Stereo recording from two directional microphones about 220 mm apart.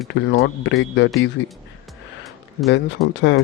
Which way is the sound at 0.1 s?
45° left (ahead or behind).